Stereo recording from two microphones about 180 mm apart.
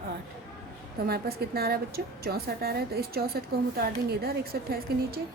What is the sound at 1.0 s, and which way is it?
A woman's voice, 60° right (ahead or behind).